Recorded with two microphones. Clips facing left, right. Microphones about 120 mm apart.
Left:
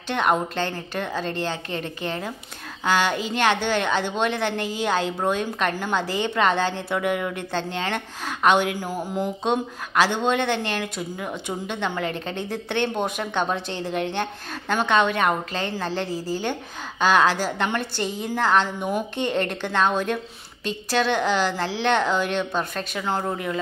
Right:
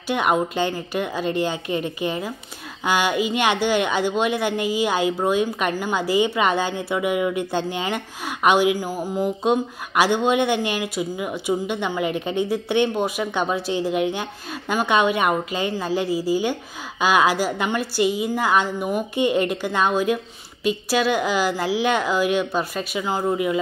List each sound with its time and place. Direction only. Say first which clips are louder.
0.1 s speech: right 2 dB; 10° right (ahead or behind)